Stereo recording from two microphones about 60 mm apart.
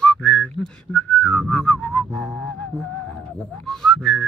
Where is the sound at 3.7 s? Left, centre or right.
Centre.